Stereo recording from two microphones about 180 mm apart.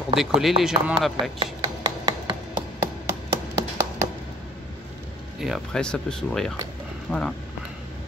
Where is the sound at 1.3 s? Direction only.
25° right (ahead or behind).